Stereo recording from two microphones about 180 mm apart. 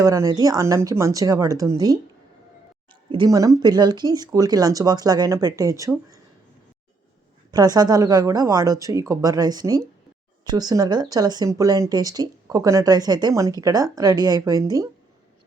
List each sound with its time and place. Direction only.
0.0 s speech: 20° right (ahead or behind)
3.1 s speech: 25° right (ahead or behind)
7.5 s speech: 20° right (ahead or behind)